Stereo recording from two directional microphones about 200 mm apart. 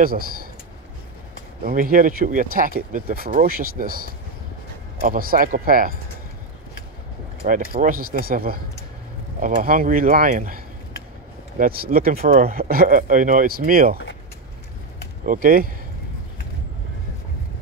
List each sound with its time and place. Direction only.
0.0 s speech: 45° right (ahead or behind)
1.6 s speech: 45° right (ahead or behind)
7.4 s speech: 40° right (ahead or behind)
15.2 s speech: 45° right (ahead or behind)